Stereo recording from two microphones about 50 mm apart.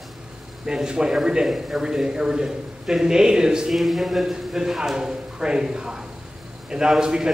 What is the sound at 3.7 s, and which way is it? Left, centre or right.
A man's voice, centre.